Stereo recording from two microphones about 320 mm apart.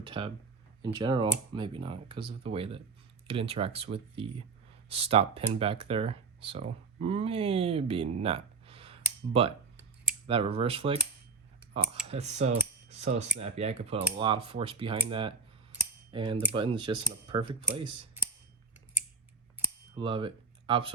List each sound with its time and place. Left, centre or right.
0.0 s speech: centre
10.2 s speech: centre
12.1 s speech: right
19.5 s a sound: centre